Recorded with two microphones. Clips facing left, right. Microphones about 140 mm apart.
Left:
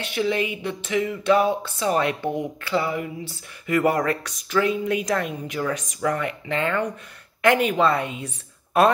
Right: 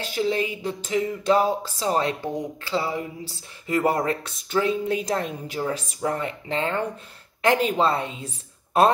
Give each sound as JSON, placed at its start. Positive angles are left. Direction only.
{"t": 0.0, "sound": "a woman's voice", "side_deg": -35}